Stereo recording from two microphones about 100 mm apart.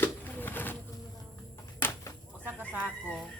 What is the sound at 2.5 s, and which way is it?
Chicken, 15° right (ahead or behind).